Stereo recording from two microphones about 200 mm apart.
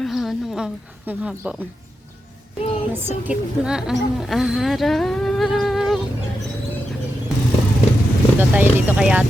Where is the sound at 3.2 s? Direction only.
5° right (ahead or behind).